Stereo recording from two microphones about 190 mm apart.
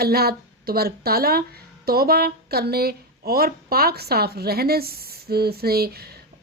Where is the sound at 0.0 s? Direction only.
55° right (ahead or behind).